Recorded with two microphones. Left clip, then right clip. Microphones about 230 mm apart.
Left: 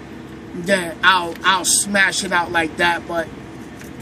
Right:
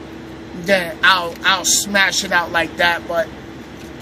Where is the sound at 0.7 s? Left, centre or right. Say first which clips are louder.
Right 2 dB; centre.